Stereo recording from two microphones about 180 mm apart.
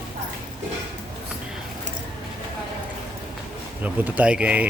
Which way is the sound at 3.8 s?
10° right (ahead or behind).